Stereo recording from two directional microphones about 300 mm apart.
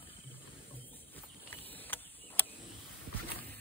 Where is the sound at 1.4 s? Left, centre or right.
Centre.